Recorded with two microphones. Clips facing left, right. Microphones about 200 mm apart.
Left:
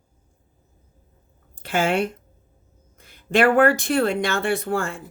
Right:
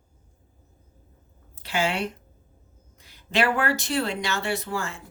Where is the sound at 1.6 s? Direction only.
50° left (ahead or behind).